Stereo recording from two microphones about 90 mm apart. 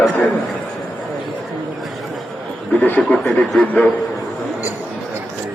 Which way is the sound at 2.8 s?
15° left (ahead or behind).